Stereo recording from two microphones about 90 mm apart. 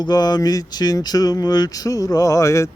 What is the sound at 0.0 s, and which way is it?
Speech, 50° left (ahead or behind).